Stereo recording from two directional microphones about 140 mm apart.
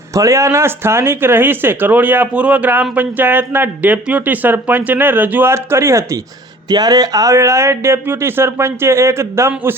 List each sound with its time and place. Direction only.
0.1 s speech: 20° right (ahead or behind)